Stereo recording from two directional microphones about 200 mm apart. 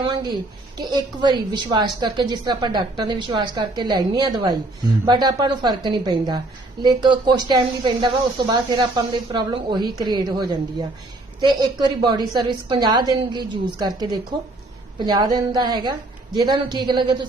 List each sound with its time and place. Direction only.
0.0 s a woman's voice: 20° right (ahead or behind)